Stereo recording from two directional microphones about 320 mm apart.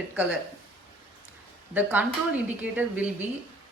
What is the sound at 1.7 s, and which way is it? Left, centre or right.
Speech, centre.